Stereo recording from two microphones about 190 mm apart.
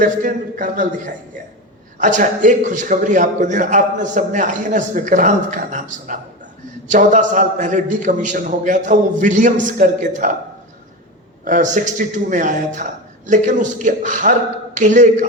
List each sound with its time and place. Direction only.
0.0 s a man's voice: 45° right (ahead or behind)
11.4 s a man's voice: 40° right (ahead or behind)